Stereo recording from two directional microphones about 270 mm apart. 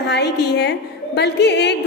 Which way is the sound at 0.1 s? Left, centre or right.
Left.